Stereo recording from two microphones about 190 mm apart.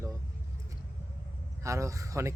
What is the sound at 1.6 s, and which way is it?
Speech, 15° right (ahead or behind).